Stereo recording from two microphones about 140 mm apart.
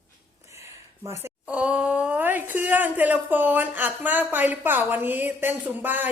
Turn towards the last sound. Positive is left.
turn(degrees=-15)  # may be behind; listen again after turning